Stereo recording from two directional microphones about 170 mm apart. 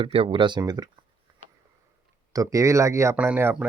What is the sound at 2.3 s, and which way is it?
Speech, 20° right (ahead or behind).